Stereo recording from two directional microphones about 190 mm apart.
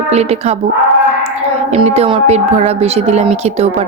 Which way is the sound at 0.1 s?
35° right (ahead or behind).